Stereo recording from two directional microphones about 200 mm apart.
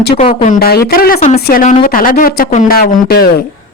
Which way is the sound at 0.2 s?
30° left (ahead or behind).